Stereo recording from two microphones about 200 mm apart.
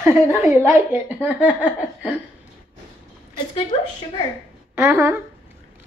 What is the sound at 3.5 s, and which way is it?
Speech, 25° left (ahead or behind).